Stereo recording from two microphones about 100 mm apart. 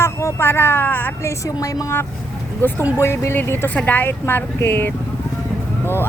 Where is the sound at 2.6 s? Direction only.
20° left (ahead or behind).